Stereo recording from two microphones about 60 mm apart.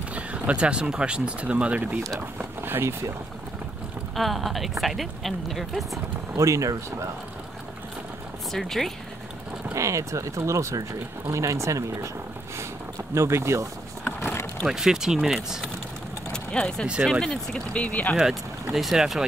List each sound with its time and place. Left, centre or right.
0.1 s speech: right
2.1 s speech: right
4.1 s a woman's voice: centre
6.3 s speech: right
8.5 s a woman's voice: centre
9.8 s speech: right
13.1 s speech: right
14.7 s speech: centre
16.3 s vehicle: centre
17.0 s a woman's voice: centre
17.3 s speech: left
18.1 s a woman's voice: centre